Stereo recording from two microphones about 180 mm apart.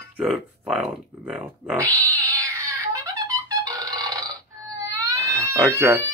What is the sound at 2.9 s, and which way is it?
Burping, 20° right (ahead or behind).